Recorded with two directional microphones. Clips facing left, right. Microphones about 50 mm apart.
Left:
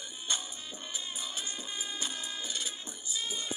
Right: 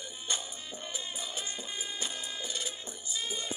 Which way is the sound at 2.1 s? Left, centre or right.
Centre.